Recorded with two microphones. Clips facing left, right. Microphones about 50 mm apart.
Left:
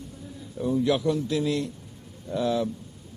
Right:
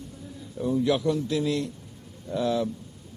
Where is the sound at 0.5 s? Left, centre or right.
Centre.